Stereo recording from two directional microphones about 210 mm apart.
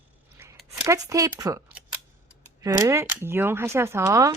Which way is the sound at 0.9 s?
15° right (ahead or behind).